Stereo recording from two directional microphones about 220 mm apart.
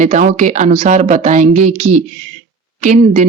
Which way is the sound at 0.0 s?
40° right (ahead or behind).